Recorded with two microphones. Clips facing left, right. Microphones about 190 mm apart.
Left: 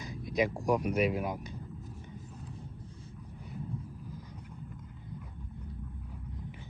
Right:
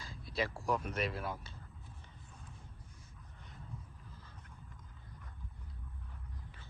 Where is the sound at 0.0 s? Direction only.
15° left (ahead or behind).